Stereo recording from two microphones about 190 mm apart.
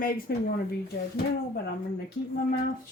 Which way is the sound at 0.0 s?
50° left (ahead or behind).